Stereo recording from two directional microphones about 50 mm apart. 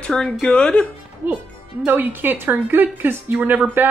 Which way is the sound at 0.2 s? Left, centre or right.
Centre.